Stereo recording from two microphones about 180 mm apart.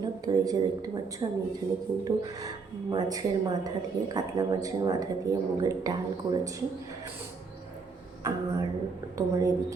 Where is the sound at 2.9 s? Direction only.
20° right (ahead or behind).